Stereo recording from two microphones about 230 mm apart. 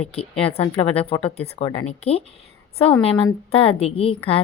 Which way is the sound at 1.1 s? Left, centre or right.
Left.